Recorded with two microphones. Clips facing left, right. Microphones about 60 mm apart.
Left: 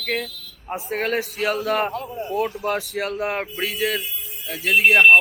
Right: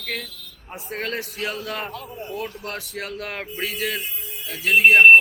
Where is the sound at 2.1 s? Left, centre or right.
Centre.